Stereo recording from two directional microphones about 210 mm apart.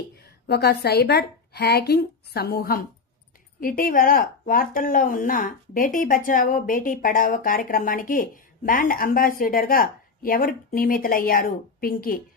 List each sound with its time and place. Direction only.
0.5 s a woman's voice: 50° left (ahead or behind)